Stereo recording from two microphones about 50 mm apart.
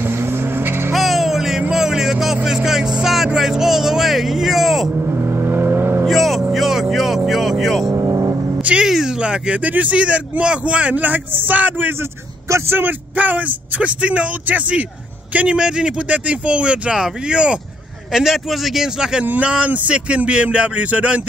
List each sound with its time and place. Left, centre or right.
0.0 s vehicle: right
0.9 s vehicle: centre
1.7 s music: centre
2.4 s vehicle: centre
4.9 s vehicle: right
6.0 s vehicle: centre
7.9 s vehicle: right
8.8 s speech: centre; by 11.9 s right
12.4 s speech: right
12.7 s speech: right; by 17.6 s centre
18.1 s speech: centre
19.2 s speech: right